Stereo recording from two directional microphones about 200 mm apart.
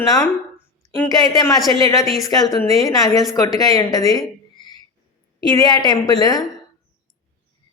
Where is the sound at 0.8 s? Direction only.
20° left (ahead or behind).